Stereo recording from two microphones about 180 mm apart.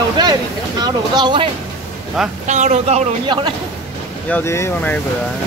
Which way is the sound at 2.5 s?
40° right (ahead or behind).